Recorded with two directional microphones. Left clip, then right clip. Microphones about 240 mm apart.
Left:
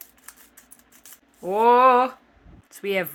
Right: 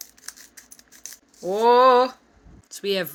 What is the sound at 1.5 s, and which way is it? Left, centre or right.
Speech, centre.